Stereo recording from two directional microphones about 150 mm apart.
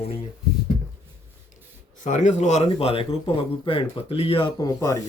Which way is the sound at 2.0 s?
55° left (ahead or behind).